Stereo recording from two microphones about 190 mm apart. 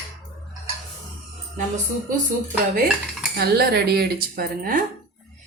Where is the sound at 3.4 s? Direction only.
55° right (ahead or behind).